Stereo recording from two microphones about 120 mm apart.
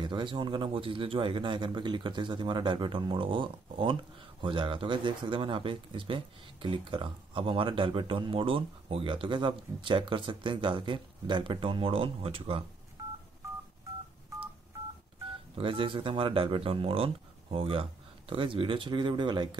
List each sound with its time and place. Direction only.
0.0 s speech: 40° right (ahead or behind)
15.5 s speech: 45° right (ahead or behind)